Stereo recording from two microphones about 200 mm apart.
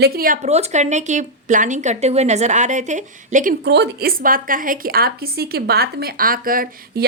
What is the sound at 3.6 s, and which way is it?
Speech, 55° right (ahead or behind).